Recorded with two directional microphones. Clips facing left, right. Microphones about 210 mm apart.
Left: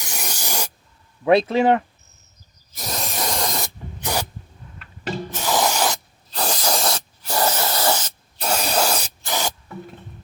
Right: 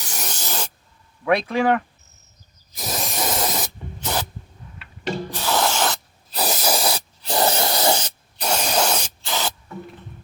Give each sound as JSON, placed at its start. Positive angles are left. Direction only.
{"t": 0.0, "sound": "spray", "side_deg": 10}
{"t": 1.2, "sound": "speech", "side_deg": 25}
{"t": 2.7, "sound": "spray", "side_deg": 0}
{"t": 4.0, "sound": "spray", "side_deg": 10}
{"t": 5.4, "sound": "spray", "side_deg": 15}
{"t": 6.3, "sound": "spray", "side_deg": -5}
{"t": 7.3, "sound": "spray", "side_deg": -15}
{"t": 8.4, "sound": "spray", "side_deg": 5}
{"t": 9.2, "sound": "spray", "side_deg": 15}